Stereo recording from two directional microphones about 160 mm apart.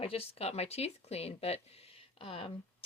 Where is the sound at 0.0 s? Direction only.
35° left (ahead or behind).